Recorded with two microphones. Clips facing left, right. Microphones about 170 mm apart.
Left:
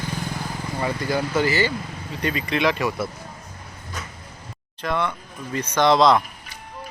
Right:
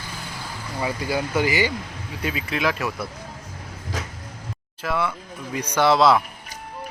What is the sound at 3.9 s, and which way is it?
Sliding door, 90° right.